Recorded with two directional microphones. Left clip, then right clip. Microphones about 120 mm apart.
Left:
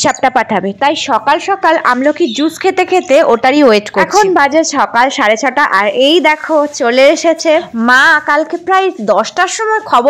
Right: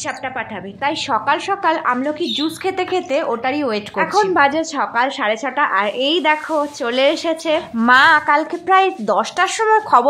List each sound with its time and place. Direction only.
0.0 s a woman's voice: 90° left
1.5 s a woman's voice: 35° left (ahead or behind)
1.9 s a woman's voice: 50° left (ahead or behind)
3.4 s a woman's voice: 85° left; by 4.1 s 70° left (ahead or behind)
4.3 s a woman's voice: 50° left (ahead or behind); by 9.7 s 30° left (ahead or behind)